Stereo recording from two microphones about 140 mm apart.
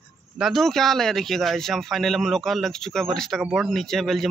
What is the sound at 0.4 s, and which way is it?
Speech, centre (ahead or behind).